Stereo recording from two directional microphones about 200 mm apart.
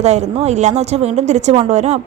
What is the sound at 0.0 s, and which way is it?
A woman's voice, 35° right (ahead or behind).